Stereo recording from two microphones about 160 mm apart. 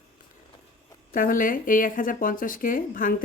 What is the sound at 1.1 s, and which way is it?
Speech, 60° left (ahead or behind).